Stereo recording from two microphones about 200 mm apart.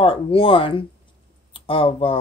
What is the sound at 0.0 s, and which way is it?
Speech, 25° left (ahead or behind).